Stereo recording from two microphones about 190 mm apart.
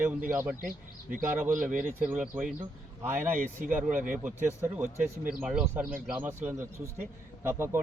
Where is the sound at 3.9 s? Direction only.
45° right (ahead or behind).